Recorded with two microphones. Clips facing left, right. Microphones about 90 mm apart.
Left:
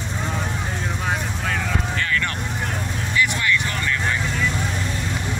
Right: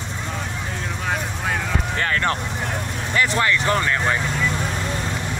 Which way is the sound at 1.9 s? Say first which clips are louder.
Right 2 dB; 40° right (ahead or behind).